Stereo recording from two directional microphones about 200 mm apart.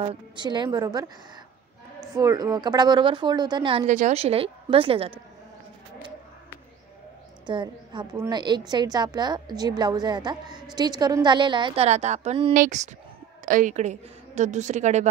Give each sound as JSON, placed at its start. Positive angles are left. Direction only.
{"t": 0.0, "sound": "a woman's voice", "side_deg": -25}
{"t": 2.1, "sound": "a woman's voice", "side_deg": -20}
{"t": 7.4, "sound": "a woman's voice", "side_deg": -25}